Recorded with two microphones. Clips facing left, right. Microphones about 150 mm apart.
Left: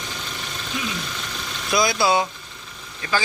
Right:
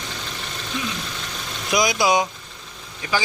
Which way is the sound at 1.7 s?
15° right (ahead or behind).